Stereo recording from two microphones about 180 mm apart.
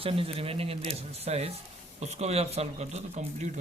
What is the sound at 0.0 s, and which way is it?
A man's voice, 30° right (ahead or behind).